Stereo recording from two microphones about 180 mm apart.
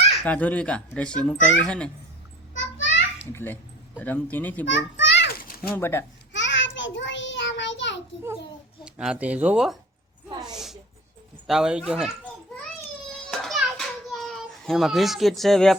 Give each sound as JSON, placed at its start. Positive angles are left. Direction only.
{"t": 0.3, "sound": "a child's voice", "side_deg": 10}
{"t": 2.6, "sound": "a sound", "side_deg": 90}
{"t": 3.3, "sound": "a child's voice", "side_deg": 10}
{"t": 4.6, "sound": "children playing", "side_deg": 90}
{"t": 5.6, "sound": "a child's voice", "side_deg": 10}
{"t": 6.3, "sound": "child singing", "side_deg": 90}
{"t": 8.8, "sound": "speech", "side_deg": -5}
{"t": 10.5, "sound": "a sound", "side_deg": 0}
{"t": 11.4, "sound": "speech", "side_deg": -5}
{"t": 13.4, "sound": "children playing", "side_deg": 0}